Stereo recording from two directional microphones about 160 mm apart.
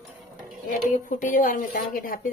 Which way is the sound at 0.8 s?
55° left (ahead or behind).